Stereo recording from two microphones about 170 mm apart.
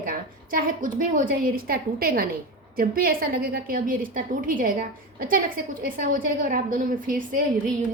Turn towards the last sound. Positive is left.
turn(degrees=-55)  # may be behind; listen again after turning